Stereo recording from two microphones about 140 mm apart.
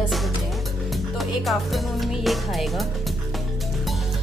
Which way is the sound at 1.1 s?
Centre (ahead or behind).